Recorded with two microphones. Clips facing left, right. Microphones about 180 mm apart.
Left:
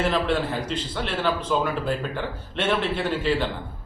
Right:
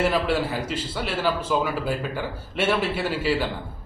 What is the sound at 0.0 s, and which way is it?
A man's voice, 10° right (ahead or behind).